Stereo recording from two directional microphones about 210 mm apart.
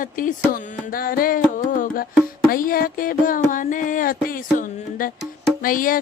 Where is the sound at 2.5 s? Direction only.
45° left (ahead or behind).